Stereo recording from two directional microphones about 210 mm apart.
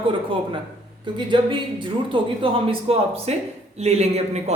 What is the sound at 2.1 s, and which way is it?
Speech, 25° right (ahead or behind).